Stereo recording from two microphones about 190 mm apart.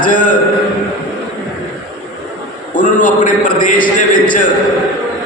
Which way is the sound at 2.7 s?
45° left (ahead or behind).